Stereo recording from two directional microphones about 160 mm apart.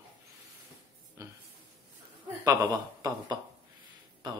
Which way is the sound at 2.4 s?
20° right (ahead or behind).